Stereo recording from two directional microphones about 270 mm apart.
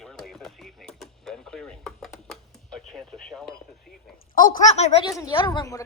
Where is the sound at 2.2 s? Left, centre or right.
Centre.